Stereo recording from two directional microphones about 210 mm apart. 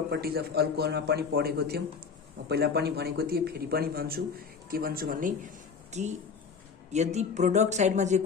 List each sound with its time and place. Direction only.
0.1 s a man's voice: 50° right (ahead or behind)